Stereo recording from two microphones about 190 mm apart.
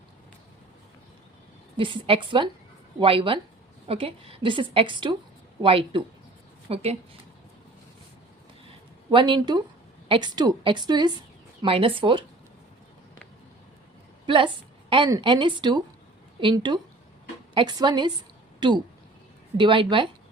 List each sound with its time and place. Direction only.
1.7 s a woman's voice: 25° right (ahead or behind)
8.6 s a sound: 25° right (ahead or behind)
10.1 s a woman's voice: 25° right (ahead or behind)
14.3 s a woman's voice: 25° right (ahead or behind)